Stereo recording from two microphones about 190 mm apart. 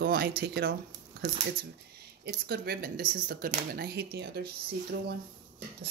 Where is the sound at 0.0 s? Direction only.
55° right (ahead or behind).